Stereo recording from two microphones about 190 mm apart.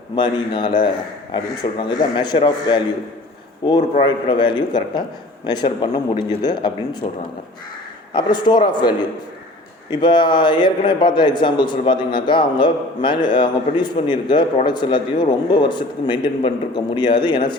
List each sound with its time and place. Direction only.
0.2 s a man's voice: 25° left (ahead or behind)
7.0 s speech: 35° left (ahead or behind)
8.1 s a man's voice: 25° left (ahead or behind)